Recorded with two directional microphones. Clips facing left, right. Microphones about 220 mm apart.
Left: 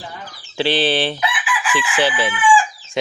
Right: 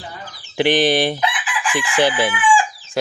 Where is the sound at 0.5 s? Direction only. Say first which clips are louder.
Right 3 dB; 15° right (ahead or behind).